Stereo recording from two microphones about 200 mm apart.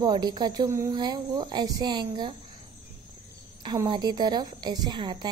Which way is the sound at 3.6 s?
20° right (ahead or behind).